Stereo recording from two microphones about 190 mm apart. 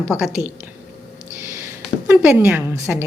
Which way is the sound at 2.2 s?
10° right (ahead or behind).